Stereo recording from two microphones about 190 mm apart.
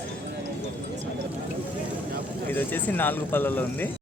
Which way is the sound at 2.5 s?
10° left (ahead or behind).